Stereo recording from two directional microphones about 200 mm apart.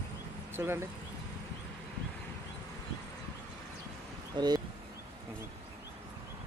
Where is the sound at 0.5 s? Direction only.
10° right (ahead or behind).